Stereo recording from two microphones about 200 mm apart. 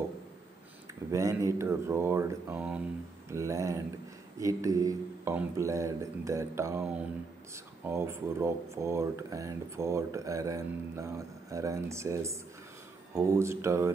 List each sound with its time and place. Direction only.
1.1 s speech: 15° right (ahead or behind)